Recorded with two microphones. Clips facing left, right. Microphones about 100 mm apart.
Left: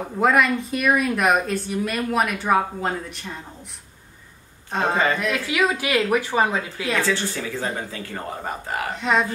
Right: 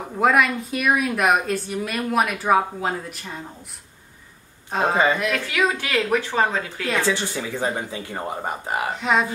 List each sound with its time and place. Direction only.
0.2 s speech: centre (ahead or behind)
4.6 s a man's voice: 5° right (ahead or behind)
4.9 s speech: 15° right (ahead or behind)
5.2 s speech: 5° left (ahead or behind)
7.0 s speech: 20° right (ahead or behind)